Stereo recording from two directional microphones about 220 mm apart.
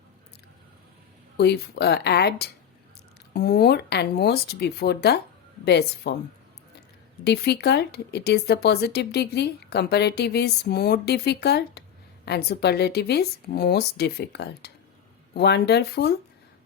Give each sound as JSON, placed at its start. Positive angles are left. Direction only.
{"t": 1.4, "sound": "speech", "side_deg": 45}
{"t": 7.3, "sound": "speech", "side_deg": 50}